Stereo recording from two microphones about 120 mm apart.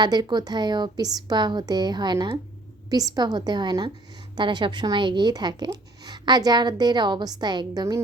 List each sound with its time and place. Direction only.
0.0 s speech: 35° right (ahead or behind)